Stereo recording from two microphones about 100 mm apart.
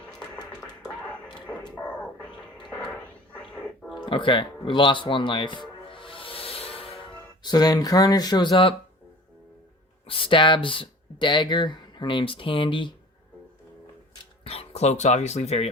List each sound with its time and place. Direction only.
0.2 s music: 45° left (ahead or behind)
1.9 s a sound: 10° left (ahead or behind)
2.6 s cat: 5° left (ahead or behind)
4.0 s speech: 55° left (ahead or behind)
5.9 s music: 60° left (ahead or behind)
7.4 s speech: 40° left (ahead or behind)
10.1 s speech: 60° left (ahead or behind)
14.4 s speech: 90° left